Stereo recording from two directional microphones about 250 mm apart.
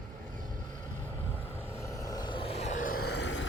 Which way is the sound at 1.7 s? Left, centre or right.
Centre.